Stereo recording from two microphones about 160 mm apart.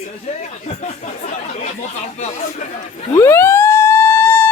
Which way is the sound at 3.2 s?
15° left (ahead or behind).